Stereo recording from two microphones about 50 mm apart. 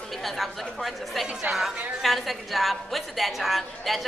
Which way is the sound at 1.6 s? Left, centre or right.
Centre.